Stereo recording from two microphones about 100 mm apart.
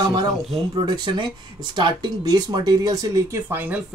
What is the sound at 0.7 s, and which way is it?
Speech, 50° right (ahead or behind).